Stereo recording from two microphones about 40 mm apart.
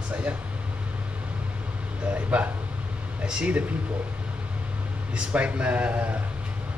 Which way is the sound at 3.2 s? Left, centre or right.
Right.